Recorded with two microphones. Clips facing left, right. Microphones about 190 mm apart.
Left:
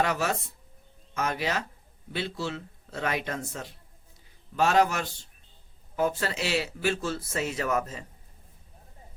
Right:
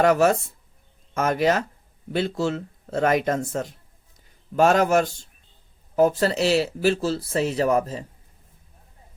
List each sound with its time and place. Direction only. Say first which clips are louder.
0.0 s speech: right 9 dB; 50° right (ahead or behind)